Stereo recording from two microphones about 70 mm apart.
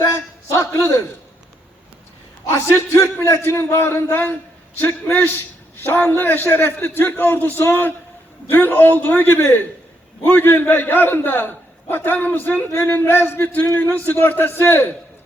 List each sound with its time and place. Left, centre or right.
0.0 s a sound: left
0.8 s a man's voice: left
2.5 s a man's voice: left